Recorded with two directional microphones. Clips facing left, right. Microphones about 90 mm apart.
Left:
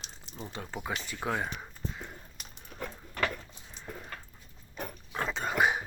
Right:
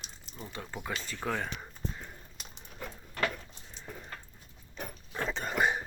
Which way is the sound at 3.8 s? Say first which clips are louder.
Left 2 dB; centre (ahead or behind).